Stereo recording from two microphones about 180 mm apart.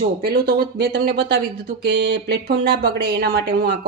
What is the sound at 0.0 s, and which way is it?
A woman's voice, 60° right (ahead or behind).